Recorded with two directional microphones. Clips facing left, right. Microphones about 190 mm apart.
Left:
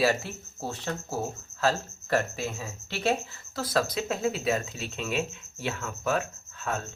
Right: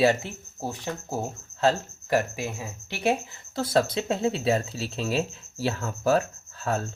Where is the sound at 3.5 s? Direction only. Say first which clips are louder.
Right 4 dB; 25° right (ahead or behind).